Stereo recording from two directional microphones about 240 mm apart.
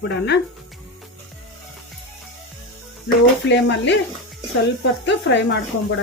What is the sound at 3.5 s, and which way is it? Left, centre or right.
Speech, left.